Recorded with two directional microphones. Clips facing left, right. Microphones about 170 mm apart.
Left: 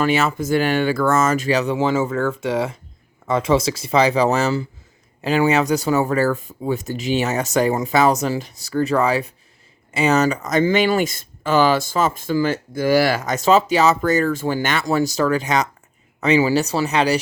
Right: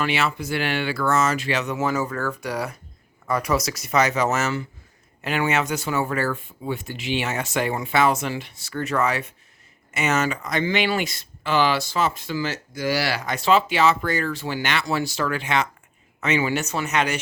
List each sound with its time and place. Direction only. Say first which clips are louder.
0.0 s speech: left 5 dB; 45° left (ahead or behind)